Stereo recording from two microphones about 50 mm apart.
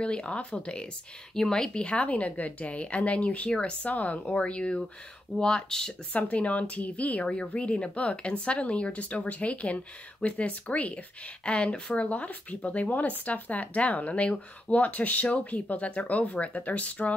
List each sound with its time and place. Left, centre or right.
0.0 s speech: left
6.1 s speech: left